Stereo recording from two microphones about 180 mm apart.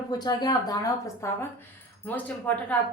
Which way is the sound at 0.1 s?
25° left (ahead or behind).